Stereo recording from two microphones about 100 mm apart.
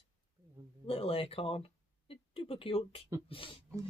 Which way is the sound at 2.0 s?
70° left (ahead or behind).